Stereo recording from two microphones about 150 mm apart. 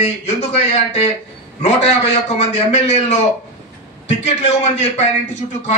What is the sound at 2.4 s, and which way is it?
A man's voice, 45° left (ahead or behind).